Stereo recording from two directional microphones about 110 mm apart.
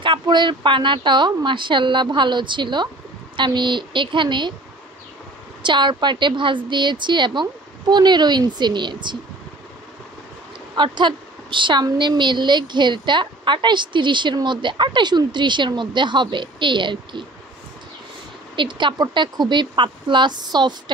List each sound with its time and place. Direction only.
0.0 s a woman's voice: 45° right (ahead or behind)
5.6 s a woman's voice: 45° right (ahead or behind)
10.8 s a woman's voice: 45° right (ahead or behind)
18.6 s a woman's voice: 45° right (ahead or behind)